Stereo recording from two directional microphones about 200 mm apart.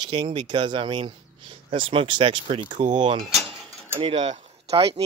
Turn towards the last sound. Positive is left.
turn(degrees=-25)  # may be behind; listen again after turning